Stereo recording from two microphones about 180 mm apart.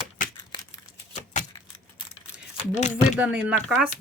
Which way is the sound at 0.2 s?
45° left (ahead or behind).